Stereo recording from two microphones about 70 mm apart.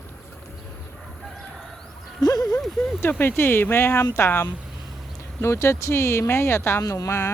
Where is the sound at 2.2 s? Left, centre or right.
Left.